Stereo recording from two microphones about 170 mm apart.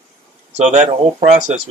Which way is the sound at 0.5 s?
40° right (ahead or behind).